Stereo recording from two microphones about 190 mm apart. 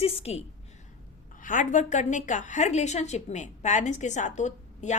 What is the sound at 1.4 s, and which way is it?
A woman's voice, 45° left (ahead or behind).